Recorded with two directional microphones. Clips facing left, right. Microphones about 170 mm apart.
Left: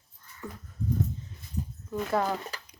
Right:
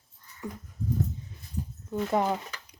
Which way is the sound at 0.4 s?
15° right (ahead or behind).